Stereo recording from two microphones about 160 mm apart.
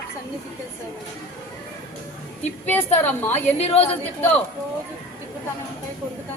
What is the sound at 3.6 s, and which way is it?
Speech, 40° left (ahead or behind).